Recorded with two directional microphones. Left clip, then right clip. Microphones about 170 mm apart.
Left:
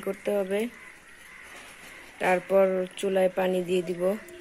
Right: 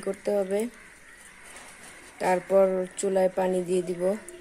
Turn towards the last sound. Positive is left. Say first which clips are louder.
# even
turn(degrees=-5)  # may be behind; listen again after turning